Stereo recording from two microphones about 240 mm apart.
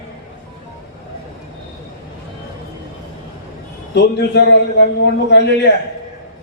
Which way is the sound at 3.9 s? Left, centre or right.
Left.